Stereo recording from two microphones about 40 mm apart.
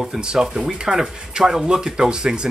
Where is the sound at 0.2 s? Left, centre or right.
Centre.